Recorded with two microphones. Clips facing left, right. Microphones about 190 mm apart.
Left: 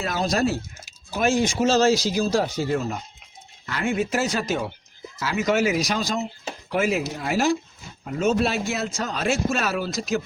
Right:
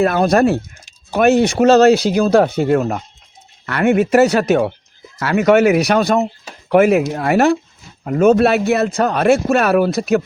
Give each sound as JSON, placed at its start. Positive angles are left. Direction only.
{"t": 0.0, "sound": "speech", "side_deg": -60}